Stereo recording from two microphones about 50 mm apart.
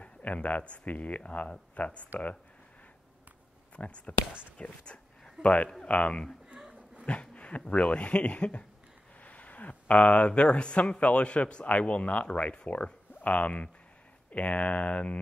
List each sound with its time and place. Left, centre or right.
0.0 s speech: left
3.7 s speech: left
4.3 s speech: right
4.6 s speech: left
6.5 s a sound: centre
7.1 s speech: left